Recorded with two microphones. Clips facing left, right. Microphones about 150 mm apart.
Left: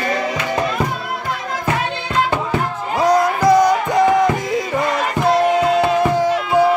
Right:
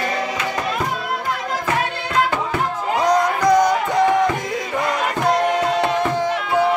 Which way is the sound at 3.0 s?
5° left (ahead or behind).